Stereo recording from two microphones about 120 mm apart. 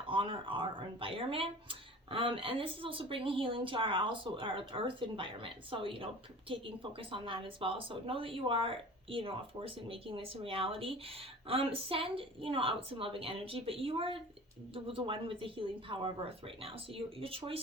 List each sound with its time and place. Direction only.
0.1 s speech: 45° right (ahead or behind)